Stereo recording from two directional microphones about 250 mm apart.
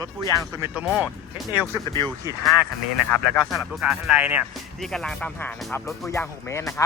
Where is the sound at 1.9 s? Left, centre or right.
Centre.